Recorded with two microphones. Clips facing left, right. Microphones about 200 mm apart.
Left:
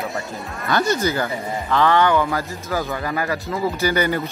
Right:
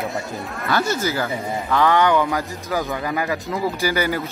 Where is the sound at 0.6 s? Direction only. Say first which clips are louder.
Left 2 dB; 5° right (ahead or behind).